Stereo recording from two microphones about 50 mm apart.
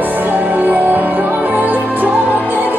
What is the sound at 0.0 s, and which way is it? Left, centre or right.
Music, right.